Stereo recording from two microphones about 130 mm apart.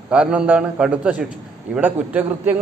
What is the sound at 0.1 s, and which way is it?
A man's voice, 10° right (ahead or behind).